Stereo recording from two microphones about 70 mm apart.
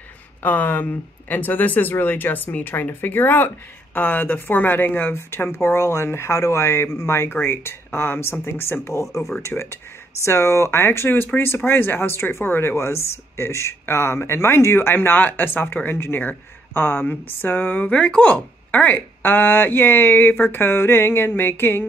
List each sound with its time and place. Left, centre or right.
0.4 s speech: left
5.1 s speech: left
17.8 s speech: centre